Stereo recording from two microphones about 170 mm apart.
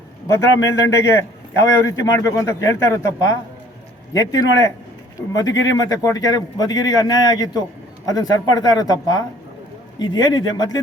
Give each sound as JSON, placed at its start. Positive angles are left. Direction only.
{"t": 0.3, "sound": "a man's voice", "side_deg": 15}